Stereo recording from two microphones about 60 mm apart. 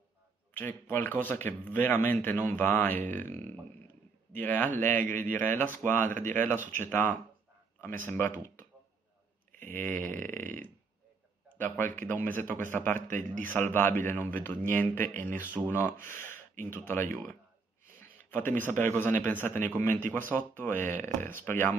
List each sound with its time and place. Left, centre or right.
0.6 s speech: left
4.4 s speech: left
9.5 s a sound: left
11.5 s speech: left
15.6 s speech: right
16.0 s a man's voice: left